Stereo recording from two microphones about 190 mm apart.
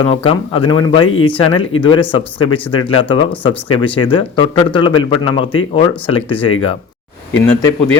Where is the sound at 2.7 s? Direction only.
25° left (ahead or behind).